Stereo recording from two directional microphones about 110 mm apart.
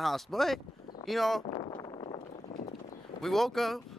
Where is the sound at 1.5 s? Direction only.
45° left (ahead or behind).